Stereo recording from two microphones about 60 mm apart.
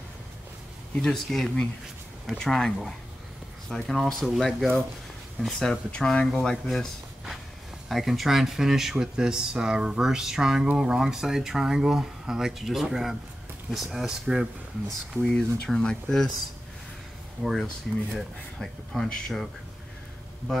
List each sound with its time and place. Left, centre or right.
0.9 s speech: centre
6.4 s speech: centre
15.2 s speech: centre
17.4 s speech: centre